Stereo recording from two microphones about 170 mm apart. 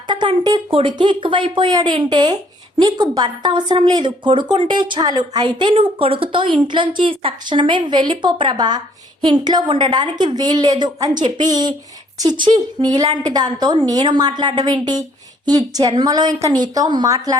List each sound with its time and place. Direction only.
0.1 s speech: 25° right (ahead or behind)